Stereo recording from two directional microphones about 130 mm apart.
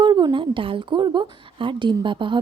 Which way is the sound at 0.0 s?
35° right (ahead or behind).